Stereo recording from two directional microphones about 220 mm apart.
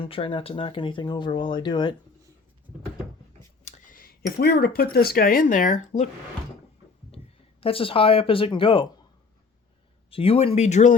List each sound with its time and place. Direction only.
0.0 s speech: 25° left (ahead or behind)
3.7 s speech: 40° left (ahead or behind)
7.6 s speech: 25° left (ahead or behind)
10.1 s speech: 25° left (ahead or behind)